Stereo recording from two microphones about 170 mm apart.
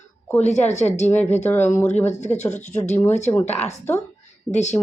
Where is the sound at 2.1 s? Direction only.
40° left (ahead or behind).